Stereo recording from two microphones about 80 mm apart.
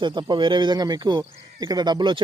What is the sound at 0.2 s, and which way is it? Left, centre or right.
Speech, right.